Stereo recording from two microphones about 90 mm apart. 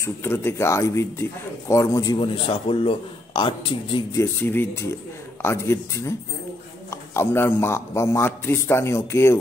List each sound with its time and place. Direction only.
0.0 s speech: 25° left (ahead or behind)
2.1 s speech: 80° left; by 4.0 s 65° left (ahead or behind)
4.1 s a man's voice: 30° left (ahead or behind)